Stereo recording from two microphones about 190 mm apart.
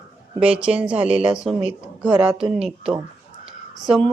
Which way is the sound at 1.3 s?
5° right (ahead or behind).